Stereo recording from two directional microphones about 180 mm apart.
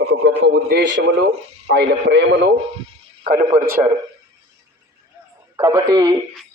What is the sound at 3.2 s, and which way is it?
Speech, 50° right (ahead or behind).